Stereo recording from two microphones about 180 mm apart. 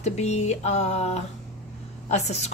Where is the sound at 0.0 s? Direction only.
35° left (ahead or behind).